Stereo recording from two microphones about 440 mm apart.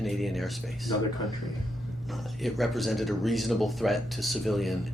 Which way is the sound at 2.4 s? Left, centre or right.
Centre.